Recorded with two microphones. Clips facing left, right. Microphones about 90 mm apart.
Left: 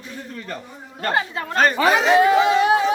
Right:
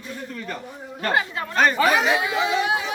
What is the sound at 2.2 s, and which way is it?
Speech, 45° left (ahead or behind).